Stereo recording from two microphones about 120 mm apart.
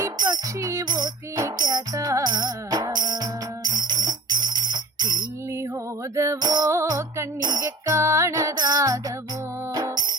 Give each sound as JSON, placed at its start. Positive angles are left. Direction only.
{"t": 0.2, "sound": "music", "side_deg": -35}
{"t": 5.5, "sound": "music", "side_deg": -25}